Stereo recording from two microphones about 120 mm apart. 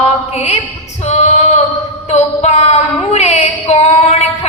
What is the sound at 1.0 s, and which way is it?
Female singing, 70° left (ahead or behind).